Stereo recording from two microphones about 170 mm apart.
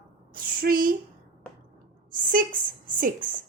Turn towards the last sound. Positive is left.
turn(degrees=-55)  # may be behind; listen again after turning